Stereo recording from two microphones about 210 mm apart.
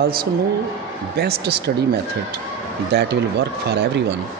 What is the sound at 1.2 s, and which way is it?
Speech, 50° right (ahead or behind).